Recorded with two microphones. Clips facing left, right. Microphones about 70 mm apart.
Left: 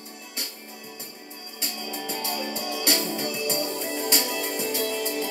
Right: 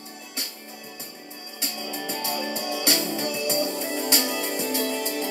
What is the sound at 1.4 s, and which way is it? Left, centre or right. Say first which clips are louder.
Music: right 2 dB; centre.